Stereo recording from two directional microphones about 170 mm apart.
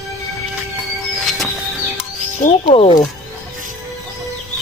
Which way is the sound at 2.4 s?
35° left (ahead or behind).